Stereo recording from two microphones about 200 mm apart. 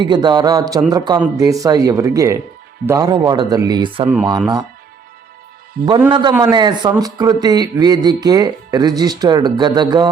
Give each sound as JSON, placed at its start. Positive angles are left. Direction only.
{"t": 0.0, "sound": "speech", "side_deg": -20}
{"t": 6.1, "sound": "speech", "side_deg": -25}